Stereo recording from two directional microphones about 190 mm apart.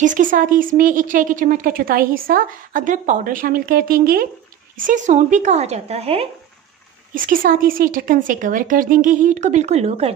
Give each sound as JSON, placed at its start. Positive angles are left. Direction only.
{"t": 0.0, "sound": "a woman's voice", "side_deg": -45}
{"t": 7.2, "sound": "a woman's voice", "side_deg": -45}